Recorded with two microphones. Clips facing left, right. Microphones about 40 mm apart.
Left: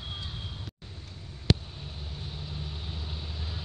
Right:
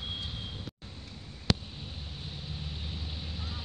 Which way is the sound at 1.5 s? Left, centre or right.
Left.